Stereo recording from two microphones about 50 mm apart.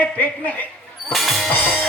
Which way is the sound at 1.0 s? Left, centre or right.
Centre.